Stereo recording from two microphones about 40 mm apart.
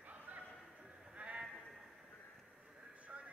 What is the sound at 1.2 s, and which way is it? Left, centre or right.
Bleat, right.